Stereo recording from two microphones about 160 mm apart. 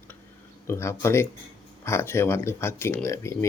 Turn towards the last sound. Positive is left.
turn(degrees=15)  # may be behind; listen again after turning